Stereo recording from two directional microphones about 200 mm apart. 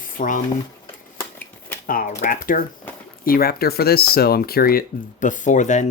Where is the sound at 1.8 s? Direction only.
45° left (ahead or behind).